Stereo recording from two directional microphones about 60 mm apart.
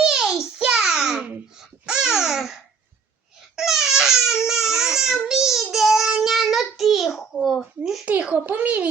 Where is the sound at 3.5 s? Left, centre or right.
Centre.